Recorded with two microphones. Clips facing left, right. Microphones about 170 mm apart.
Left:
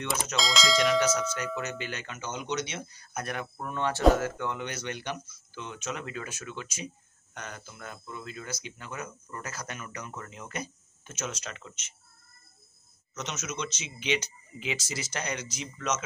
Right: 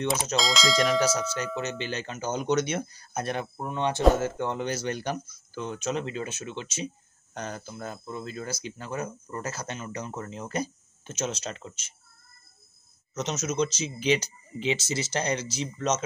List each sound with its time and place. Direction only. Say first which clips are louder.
0.0 s speech: right 5 dB; 30° right (ahead or behind)
0.4 s speech: even; centre (ahead or behind)
1.6 s speech: right 4 dB; 25° right (ahead or behind)
4.2 s speech: right 4 dB; 30° right (ahead or behind)
13.1 s speech: right 7 dB; 35° right (ahead or behind)